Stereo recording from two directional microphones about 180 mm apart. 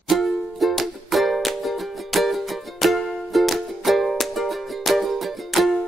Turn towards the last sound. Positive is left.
turn(degrees=0)  # may be behind; listen again after turning